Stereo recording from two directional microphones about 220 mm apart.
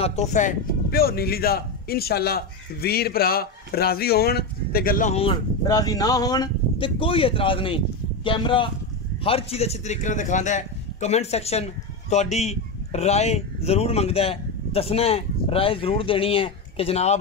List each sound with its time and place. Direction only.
0.0 s a man's voice: 30° left (ahead or behind)